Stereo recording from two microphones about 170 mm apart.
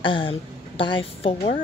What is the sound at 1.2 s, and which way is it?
Speech, 45° left (ahead or behind).